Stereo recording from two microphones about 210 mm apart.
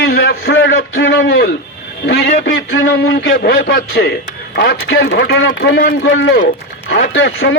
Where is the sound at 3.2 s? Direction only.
50° left (ahead or behind).